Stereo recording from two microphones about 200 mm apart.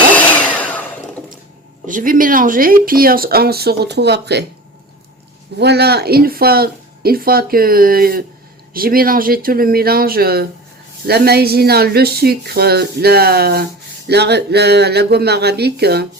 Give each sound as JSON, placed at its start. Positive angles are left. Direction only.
{"t": 0.1, "sound": "a sound", "side_deg": 5}
{"t": 1.9, "sound": "speech", "side_deg": -40}
{"t": 5.5, "sound": "speech", "side_deg": -55}